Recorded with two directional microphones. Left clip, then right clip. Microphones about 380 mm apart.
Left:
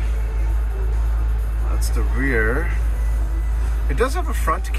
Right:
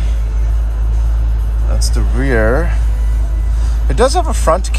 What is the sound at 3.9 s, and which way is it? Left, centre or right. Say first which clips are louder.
Speech: right 10 dB; centre.